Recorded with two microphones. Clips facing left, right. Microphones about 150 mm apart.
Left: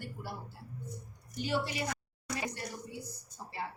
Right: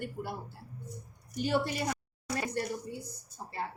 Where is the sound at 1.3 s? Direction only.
50° right (ahead or behind).